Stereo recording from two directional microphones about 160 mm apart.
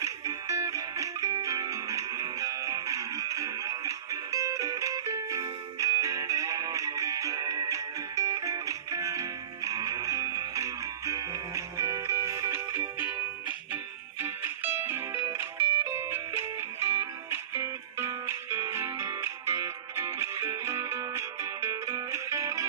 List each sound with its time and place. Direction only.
0.0 s music: 20° right (ahead or behind)